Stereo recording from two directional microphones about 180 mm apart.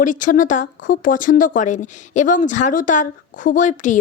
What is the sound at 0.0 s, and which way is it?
Speech, 45° left (ahead or behind).